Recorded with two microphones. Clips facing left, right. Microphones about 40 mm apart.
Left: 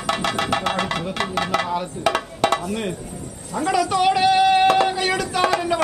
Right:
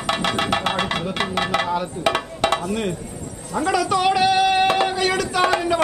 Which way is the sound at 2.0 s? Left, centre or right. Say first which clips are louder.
Left 1 dB; right.